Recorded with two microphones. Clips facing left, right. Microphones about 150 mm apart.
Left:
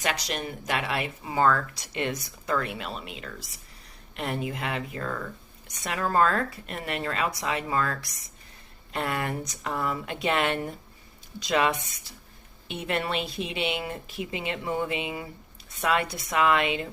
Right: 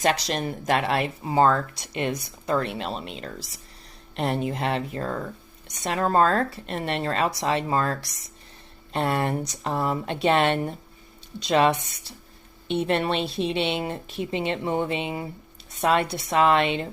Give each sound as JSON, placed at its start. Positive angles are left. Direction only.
{"t": 0.0, "sound": "a woman's voice", "side_deg": -35}